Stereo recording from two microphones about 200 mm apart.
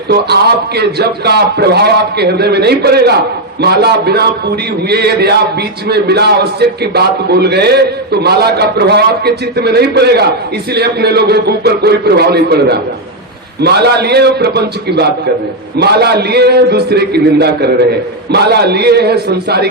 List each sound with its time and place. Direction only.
0.8 s a man's voice: 55° right (ahead or behind)